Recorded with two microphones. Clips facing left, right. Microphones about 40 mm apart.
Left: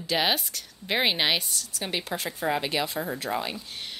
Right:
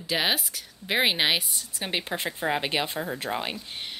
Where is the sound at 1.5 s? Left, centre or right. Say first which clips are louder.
Right 1 dB; right.